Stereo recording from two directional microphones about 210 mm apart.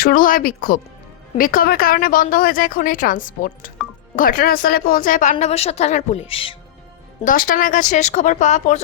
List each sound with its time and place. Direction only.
0.0 s a woman's voice: 40° left (ahead or behind); by 6.6 s 25° left (ahead or behind)
7.3 s a woman's voice: 40° left (ahead or behind)